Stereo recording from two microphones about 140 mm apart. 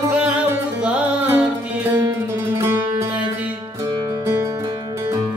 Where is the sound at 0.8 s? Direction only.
10° right (ahead or behind).